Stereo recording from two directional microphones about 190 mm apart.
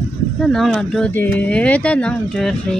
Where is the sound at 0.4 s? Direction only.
Centre (ahead or behind).